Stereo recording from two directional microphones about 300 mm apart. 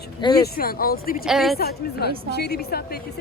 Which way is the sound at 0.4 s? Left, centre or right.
Left.